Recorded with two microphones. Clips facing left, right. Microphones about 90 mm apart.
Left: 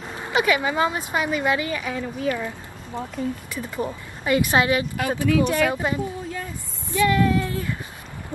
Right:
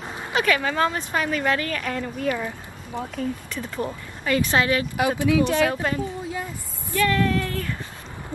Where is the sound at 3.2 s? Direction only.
10° left (ahead or behind).